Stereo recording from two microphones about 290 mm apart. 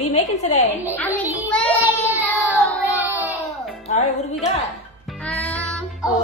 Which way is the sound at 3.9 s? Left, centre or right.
Left.